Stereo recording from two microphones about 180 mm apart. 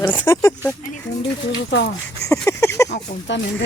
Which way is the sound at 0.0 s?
15° left (ahead or behind).